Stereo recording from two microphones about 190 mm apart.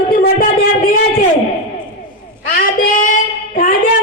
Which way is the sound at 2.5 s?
45° left (ahead or behind).